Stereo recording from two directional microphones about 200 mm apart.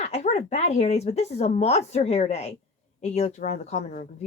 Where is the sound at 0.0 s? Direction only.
35° left (ahead or behind).